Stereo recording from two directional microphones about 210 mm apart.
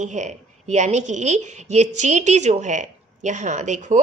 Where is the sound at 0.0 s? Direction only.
35° right (ahead or behind).